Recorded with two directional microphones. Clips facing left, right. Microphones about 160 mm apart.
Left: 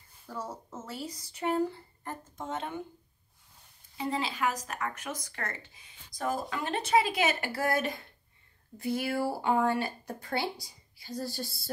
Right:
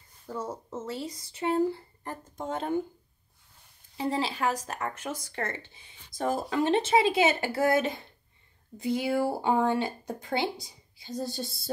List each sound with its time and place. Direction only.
0.3 s speech: 25° right (ahead or behind)
4.0 s speech: 30° right (ahead or behind)